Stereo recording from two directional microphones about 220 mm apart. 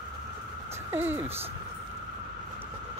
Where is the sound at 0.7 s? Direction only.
10° right (ahead or behind).